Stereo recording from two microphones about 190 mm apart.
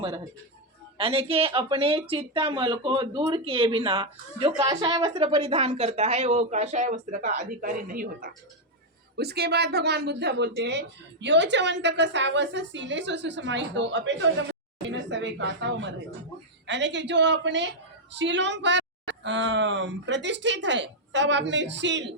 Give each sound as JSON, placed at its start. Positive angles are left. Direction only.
{"t": 0.9, "sound": "speech", "side_deg": -30}
{"t": 9.1, "sound": "a woman's voice", "side_deg": -60}